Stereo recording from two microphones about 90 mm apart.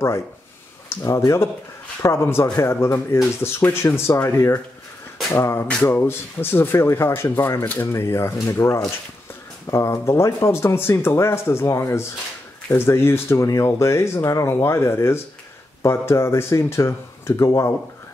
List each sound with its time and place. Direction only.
0.8 s speech: 35° left (ahead or behind); by 7.9 s 20° left (ahead or behind)
7.9 s speech: 30° left (ahead or behind)